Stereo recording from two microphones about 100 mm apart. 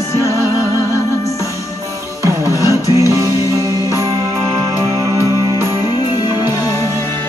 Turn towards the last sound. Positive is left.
turn(degrees=40)  # may be behind; listen again after turning